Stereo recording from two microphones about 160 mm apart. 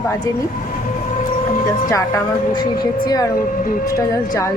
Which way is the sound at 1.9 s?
20° left (ahead or behind).